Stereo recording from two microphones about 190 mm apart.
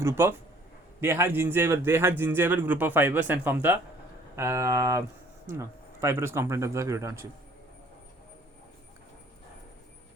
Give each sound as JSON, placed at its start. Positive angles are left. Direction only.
{"t": 0.0, "sound": "a man's voice", "side_deg": -15}